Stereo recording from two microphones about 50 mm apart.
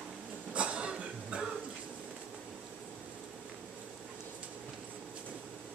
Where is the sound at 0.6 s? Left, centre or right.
Right.